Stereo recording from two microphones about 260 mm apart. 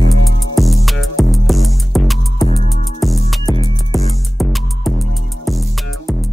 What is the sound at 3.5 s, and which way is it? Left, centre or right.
Music, centre.